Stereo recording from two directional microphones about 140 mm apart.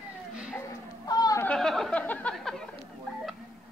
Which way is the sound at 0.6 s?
30° left (ahead or behind).